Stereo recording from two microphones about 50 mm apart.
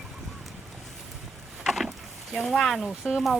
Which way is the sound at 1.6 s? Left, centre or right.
Centre.